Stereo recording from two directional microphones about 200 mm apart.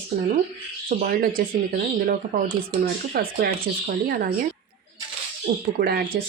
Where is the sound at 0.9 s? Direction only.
45° right (ahead or behind).